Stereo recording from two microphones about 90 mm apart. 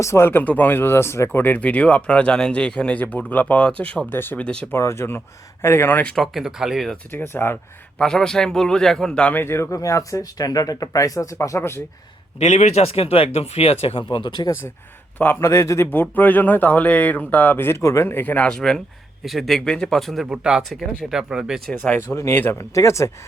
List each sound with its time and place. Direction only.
0.0 s speech: 30° left (ahead or behind); by 4.0 s 15° left (ahead or behind)
4.1 s speech: 25° left (ahead or behind)
6.1 s speech: 5° right (ahead or behind)
7.1 s speech: 25° left (ahead or behind)
7.9 s speech: 10° left (ahead or behind)
9.3 s speech: 25° left (ahead or behind)
12.8 s speech: 90° left; by 14.4 s 70° left (ahead or behind)
15.2 s speech: 25° left (ahead or behind)
15.9 s speech: 20° left (ahead or behind); by 21.6 s 10° right (ahead or behind)
21.7 s speech: 10° left (ahead or behind)
22.0 s speech: 30° left (ahead or behind)
22.7 s speech: 35° left (ahead or behind)